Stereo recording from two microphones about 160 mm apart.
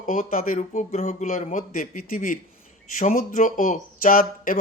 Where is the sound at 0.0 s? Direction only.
60° left (ahead or behind).